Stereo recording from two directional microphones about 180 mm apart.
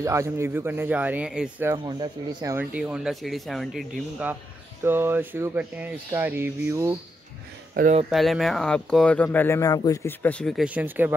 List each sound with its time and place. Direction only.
0.0 s speech: 15° right (ahead or behind)
1.9 s speech: 20° right (ahead or behind)
2.6 s speech: 5° right (ahead or behind)
7.8 s speech: 50° right (ahead or behind)
8.1 s speech: centre (ahead or behind)